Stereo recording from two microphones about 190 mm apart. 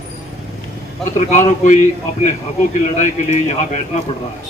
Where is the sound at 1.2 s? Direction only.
40° left (ahead or behind).